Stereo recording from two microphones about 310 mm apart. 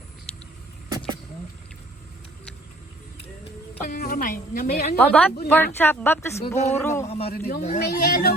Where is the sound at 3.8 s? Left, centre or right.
Left.